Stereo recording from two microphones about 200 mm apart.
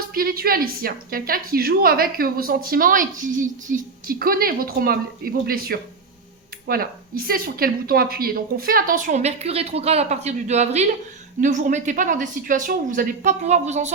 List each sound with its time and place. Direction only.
0.0 s a woman's voice: 45° right (ahead or behind)